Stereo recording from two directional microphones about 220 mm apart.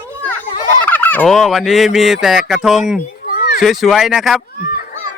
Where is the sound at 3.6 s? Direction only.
Centre (ahead or behind).